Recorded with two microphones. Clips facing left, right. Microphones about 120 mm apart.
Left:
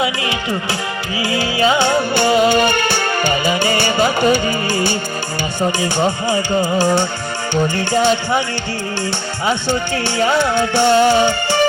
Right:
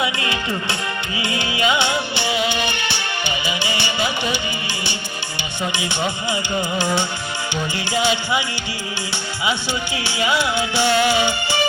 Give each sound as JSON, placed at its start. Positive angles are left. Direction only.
{"t": 0.0, "sound": "music", "side_deg": 30}
{"t": 7.5, "sound": "music", "side_deg": -15}
{"t": 7.9, "sound": "music", "side_deg": 45}
{"t": 9.6, "sound": "music", "side_deg": -10}
{"t": 10.6, "sound": "music", "side_deg": 50}